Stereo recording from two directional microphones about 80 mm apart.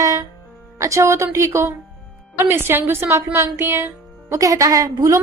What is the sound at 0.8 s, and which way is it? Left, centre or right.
A woman's voice, right.